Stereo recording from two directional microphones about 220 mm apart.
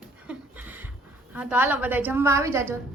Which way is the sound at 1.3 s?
5° right (ahead or behind).